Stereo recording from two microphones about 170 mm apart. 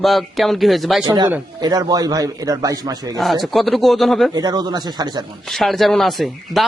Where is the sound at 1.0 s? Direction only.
25° right (ahead or behind).